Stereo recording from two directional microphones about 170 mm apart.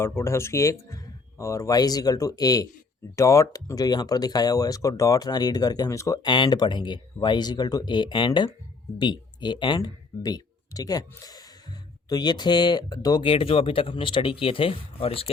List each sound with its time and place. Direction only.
0.0 s speech: 15° left (ahead or behind); by 15.3 s 35° left (ahead or behind)